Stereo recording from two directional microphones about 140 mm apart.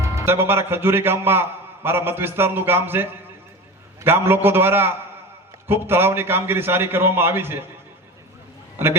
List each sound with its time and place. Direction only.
0.0 s a man's voice: 20° right (ahead or behind)